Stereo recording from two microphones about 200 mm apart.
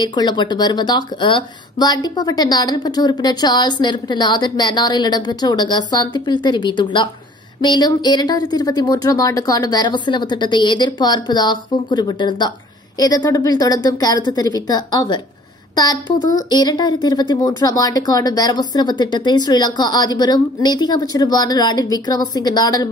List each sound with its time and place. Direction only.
0.0 s speech: 20° left (ahead or behind)